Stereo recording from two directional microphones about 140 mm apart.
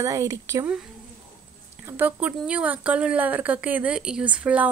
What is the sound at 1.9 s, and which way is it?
Speech, 15° right (ahead or behind).